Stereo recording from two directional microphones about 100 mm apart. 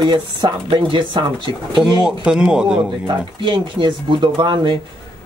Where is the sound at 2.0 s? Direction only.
10° right (ahead or behind).